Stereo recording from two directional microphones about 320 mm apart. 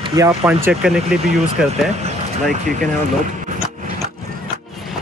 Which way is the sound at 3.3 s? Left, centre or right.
Right.